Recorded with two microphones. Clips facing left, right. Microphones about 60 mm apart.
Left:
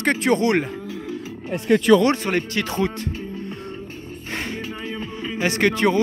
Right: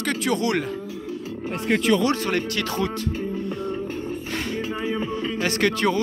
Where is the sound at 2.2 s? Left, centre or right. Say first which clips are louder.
Left 1 dB; left.